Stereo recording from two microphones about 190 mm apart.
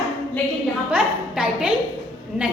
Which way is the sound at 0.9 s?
5° right (ahead or behind).